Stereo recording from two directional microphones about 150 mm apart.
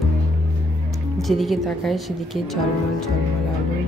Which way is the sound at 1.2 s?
Centre (ahead or behind).